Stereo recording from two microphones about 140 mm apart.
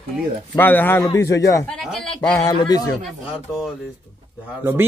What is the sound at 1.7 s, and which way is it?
Speech, centre (ahead or behind).